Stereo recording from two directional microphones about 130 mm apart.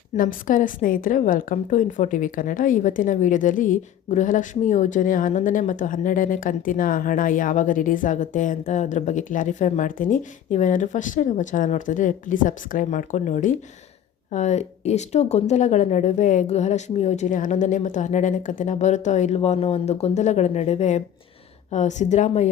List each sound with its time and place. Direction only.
0.2 s a woman's voice: 90° left; by 22.4 s 65° left (ahead or behind)